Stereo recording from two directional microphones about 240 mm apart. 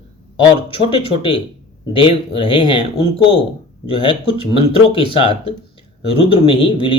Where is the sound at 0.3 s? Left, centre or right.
Left.